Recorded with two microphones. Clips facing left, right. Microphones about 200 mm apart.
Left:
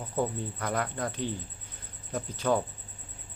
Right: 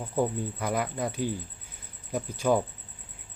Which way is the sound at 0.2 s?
10° right (ahead or behind).